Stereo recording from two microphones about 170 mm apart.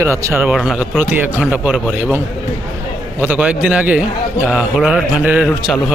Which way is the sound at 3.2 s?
10° right (ahead or behind).